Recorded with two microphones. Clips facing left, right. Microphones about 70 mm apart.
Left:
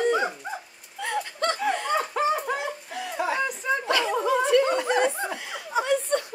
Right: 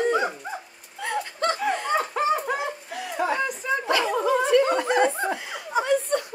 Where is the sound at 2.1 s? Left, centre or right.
Centre.